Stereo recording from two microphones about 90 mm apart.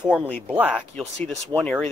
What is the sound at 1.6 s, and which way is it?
Speech, 5° left (ahead or behind).